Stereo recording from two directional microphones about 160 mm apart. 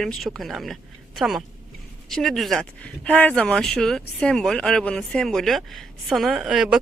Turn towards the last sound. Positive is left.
turn(degrees=-5)  # may be behind; listen again after turning